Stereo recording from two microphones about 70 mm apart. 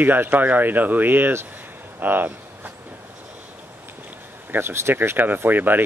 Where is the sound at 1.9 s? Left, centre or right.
Right.